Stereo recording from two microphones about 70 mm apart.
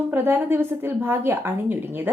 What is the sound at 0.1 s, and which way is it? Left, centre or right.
A woman's voice, right.